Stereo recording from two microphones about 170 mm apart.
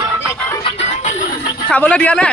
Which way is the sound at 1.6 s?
10° left (ahead or behind).